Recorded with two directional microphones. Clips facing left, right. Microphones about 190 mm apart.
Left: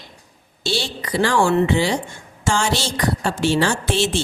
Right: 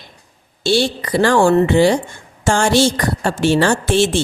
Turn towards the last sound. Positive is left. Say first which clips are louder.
# right 5 dB
turn(degrees=-50)  # may be behind; listen again after turning